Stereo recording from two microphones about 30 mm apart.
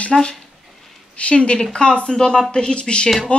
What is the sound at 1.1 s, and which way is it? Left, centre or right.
Speech, left.